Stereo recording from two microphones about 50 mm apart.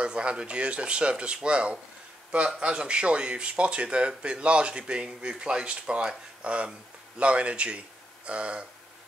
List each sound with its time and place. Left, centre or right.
0.0 s speech: right